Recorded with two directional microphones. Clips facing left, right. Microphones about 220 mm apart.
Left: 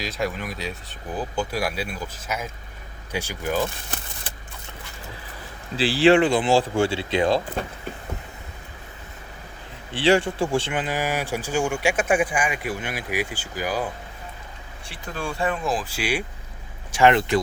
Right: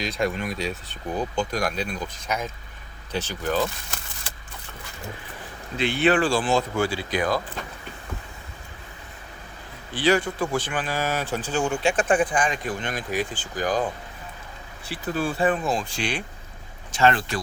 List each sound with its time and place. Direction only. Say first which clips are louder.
0.0 s speech: right 2 dB; centre (ahead or behind)
5.7 s speech: left 4 dB; 30° left (ahead or behind)
9.9 s speech: left 2 dB; 30° left (ahead or behind); by 13.8 s 10° left (ahead or behind)
14.8 s speech: right 5 dB; 5° right (ahead or behind); by 17.4 s 20° left (ahead or behind)